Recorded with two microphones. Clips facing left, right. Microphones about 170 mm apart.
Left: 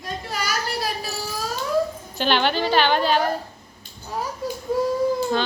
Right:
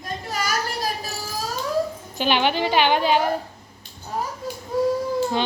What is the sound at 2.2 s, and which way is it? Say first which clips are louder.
A woman's voice: even; 10° right (ahead or behind).